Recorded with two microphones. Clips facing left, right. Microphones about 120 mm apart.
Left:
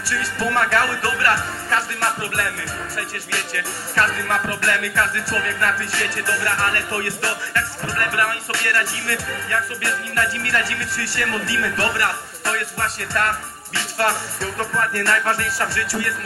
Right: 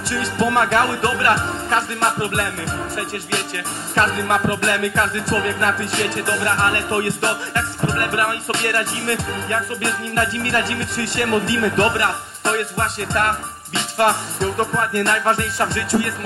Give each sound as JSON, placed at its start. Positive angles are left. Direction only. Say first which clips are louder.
{"t": 0.0, "sound": "music", "louder": "right 4 dB", "side_deg": -20}